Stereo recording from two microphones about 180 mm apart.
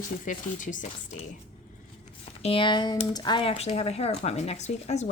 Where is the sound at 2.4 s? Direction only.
30° left (ahead or behind).